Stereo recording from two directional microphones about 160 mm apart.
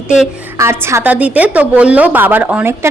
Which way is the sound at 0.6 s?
15° right (ahead or behind).